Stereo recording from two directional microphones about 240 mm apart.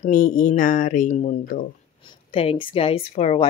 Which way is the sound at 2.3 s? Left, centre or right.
Left.